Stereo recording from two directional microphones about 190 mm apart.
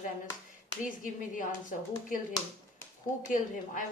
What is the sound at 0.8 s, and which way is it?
Speech, 45° left (ahead or behind).